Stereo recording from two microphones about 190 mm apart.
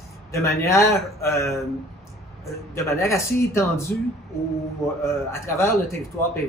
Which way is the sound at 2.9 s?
15° left (ahead or behind).